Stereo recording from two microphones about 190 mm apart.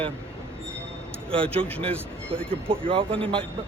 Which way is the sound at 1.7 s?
5° left (ahead or behind).